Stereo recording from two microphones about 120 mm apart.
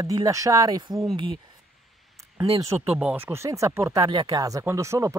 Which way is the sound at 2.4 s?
25° right (ahead or behind).